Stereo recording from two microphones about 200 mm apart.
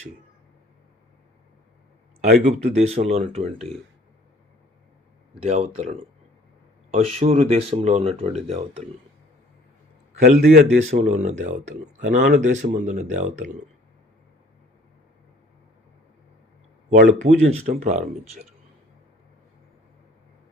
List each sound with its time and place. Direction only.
2.4 s speech: 35° right (ahead or behind)
5.3 s speech: 35° right (ahead or behind)
10.2 s speech: 40° right (ahead or behind)
17.1 s speech: 35° right (ahead or behind)